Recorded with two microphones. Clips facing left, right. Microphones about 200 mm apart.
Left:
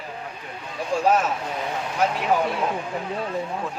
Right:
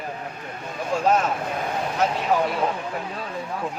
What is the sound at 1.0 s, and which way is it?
Speech, 5° left (ahead or behind).